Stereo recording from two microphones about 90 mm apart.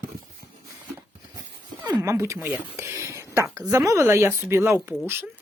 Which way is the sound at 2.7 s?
30° right (ahead or behind).